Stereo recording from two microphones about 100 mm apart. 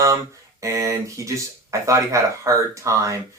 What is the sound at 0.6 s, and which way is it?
Speech, 30° right (ahead or behind).